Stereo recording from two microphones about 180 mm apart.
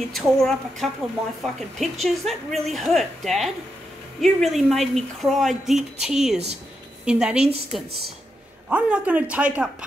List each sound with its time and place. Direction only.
0.1 s a woman's voice: centre (ahead or behind)
6.3 s a woman's voice: 35° right (ahead or behind)
7.1 s a woman's voice: 5° right (ahead or behind)
8.6 s speech: 5° right (ahead or behind)